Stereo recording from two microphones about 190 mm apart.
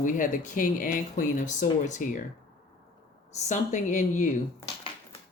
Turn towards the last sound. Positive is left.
turn(degrees=35)  # may be behind; listen again after turning